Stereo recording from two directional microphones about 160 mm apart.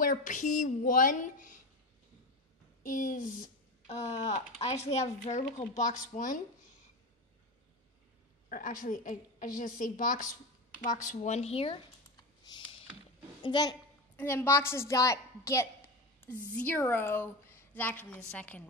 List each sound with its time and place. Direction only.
0.0 s speech: 55° left (ahead or behind)
2.8 s speech: 55° left (ahead or behind)
3.8 s speech: 40° left (ahead or behind)
8.5 s a woman's voice: 55° left (ahead or behind); by 11.8 s 35° left (ahead or behind)
12.2 s computer keyboard: 25° left (ahead or behind)
13.4 s a child's voice: 25° left (ahead or behind)
14.1 s a woman's voice: 15° left (ahead or behind)